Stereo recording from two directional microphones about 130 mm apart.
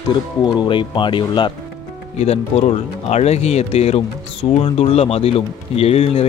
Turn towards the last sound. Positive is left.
turn(degrees=50)  # may be behind; listen again after turning